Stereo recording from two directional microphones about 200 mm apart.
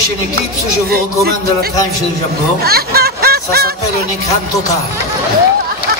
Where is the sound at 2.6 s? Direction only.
50° right (ahead or behind).